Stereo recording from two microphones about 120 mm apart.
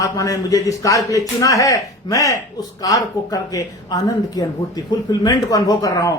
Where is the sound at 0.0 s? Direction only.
25° left (ahead or behind).